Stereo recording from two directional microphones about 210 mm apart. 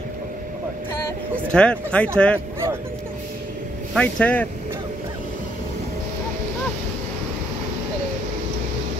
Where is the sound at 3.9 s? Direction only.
5° left (ahead or behind).